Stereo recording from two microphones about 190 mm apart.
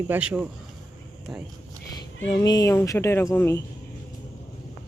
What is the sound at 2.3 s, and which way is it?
Speech, 20° left (ahead or behind).